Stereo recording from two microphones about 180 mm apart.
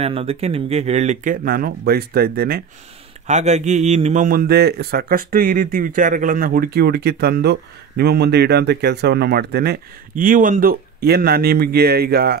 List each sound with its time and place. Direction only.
0.0 s a man's voice: 35° right (ahead or behind); by 2.6 s 60° right (ahead or behind)
3.3 s a man's voice: 40° right (ahead or behind); by 12.4 s 60° right (ahead or behind)